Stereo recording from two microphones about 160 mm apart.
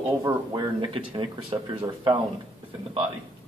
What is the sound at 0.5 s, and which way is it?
Speech, 30° right (ahead or behind).